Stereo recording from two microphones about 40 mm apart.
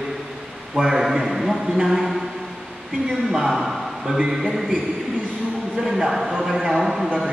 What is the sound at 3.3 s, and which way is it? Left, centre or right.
A man's voice, centre.